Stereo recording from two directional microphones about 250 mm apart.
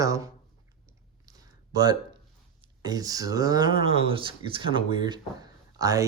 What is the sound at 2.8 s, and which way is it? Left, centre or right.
Speech, centre.